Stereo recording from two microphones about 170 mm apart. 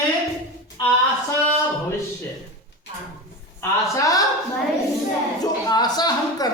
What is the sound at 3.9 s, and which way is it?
Speech, 20° left (ahead or behind).